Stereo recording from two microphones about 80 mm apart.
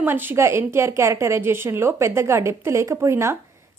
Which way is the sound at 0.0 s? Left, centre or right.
Right.